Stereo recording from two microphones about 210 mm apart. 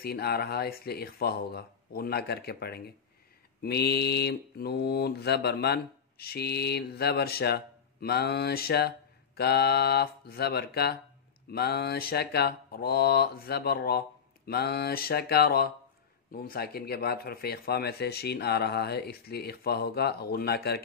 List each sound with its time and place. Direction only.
0.0 s mantra: 50° left (ahead or behind)